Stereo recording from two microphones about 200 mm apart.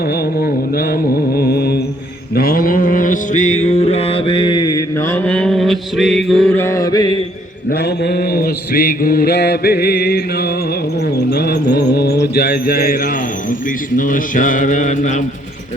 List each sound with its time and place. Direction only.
0.1 s mantra: 50° left (ahead or behind); by 7.1 s 20° left (ahead or behind)
7.7 s mantra: 55° left (ahead or behind); by 15.2 s 40° left (ahead or behind)